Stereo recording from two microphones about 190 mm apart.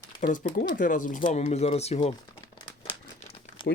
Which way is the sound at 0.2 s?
45° left (ahead or behind).